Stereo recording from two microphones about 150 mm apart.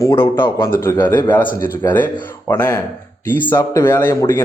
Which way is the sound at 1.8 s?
15° left (ahead or behind).